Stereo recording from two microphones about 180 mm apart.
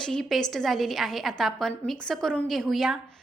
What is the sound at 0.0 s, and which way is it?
A woman's voice, centre (ahead or behind).